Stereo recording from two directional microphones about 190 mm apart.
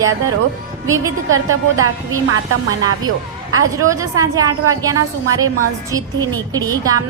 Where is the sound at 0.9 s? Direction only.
15° right (ahead or behind).